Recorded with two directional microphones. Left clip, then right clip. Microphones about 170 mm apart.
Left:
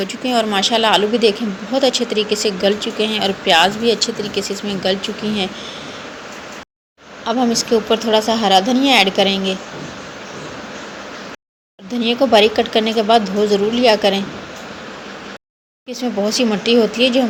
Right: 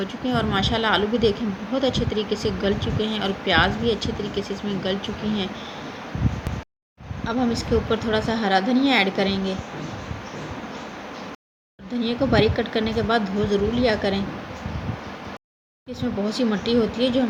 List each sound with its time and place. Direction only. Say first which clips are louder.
0.0 s a woman's voice: left 7 dB; 10° left (ahead or behind)
7.3 s a woman's voice: left 7 dB; 10° left (ahead or behind)
11.9 s a woman's voice: left 8 dB; 15° left (ahead or behind)
15.9 s a woman's voice: left 8 dB; 15° left (ahead or behind)